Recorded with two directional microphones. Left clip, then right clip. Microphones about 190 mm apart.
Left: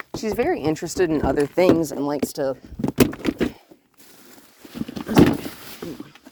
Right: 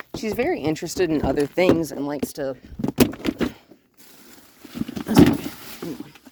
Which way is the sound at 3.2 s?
20° left (ahead or behind).